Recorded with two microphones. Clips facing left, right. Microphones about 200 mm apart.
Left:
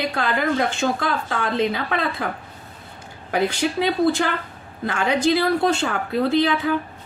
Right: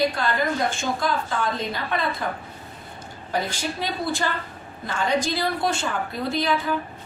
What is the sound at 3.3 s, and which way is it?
A woman's voice, 65° left (ahead or behind).